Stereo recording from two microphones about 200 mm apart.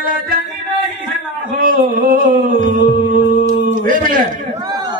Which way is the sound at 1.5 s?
45° right (ahead or behind).